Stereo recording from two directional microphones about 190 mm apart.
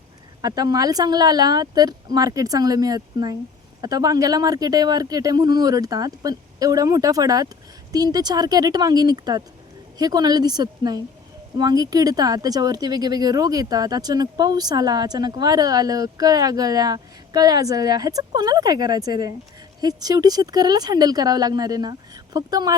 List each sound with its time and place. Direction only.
0.4 s speech: 20° right (ahead or behind)